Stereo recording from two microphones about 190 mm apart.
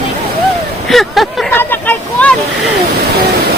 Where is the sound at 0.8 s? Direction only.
Centre (ahead or behind).